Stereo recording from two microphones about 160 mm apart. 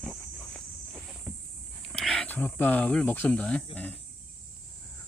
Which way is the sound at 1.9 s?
5° left (ahead or behind).